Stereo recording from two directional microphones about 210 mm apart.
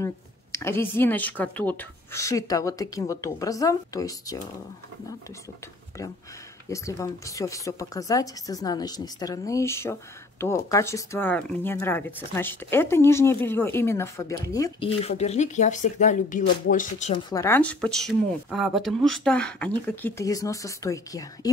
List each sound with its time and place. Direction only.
0.0 s speech: 15° left (ahead or behind)
6.7 s speech: 15° left (ahead or behind)
15.0 s speech: 30° left (ahead or behind)
17.1 s speech: 15° left (ahead or behind)